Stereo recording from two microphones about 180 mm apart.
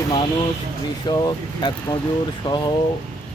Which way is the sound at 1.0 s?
25° left (ahead or behind).